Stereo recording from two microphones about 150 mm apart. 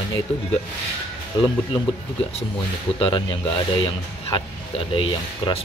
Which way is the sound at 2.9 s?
35° left (ahead or behind).